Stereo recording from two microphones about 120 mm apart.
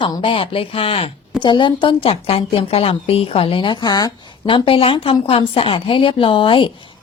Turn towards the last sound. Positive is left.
turn(degrees=45)  # may be behind; listen again after turning